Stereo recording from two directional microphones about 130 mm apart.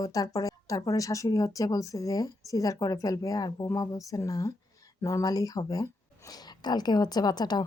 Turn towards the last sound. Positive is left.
turn(degrees=30)  # may be behind; listen again after turning